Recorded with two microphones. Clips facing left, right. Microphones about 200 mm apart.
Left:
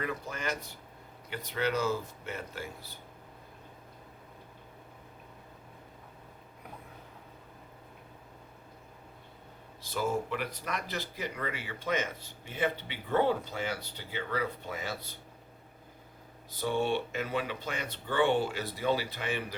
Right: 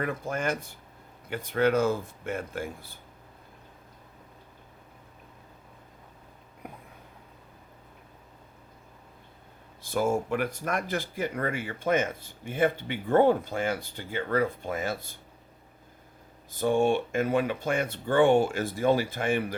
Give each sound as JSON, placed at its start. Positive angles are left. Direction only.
{"t": 0.0, "sound": "speech", "side_deg": -50}
{"t": 9.8, "sound": "speech", "side_deg": -50}
{"t": 16.5, "sound": "speech", "side_deg": -50}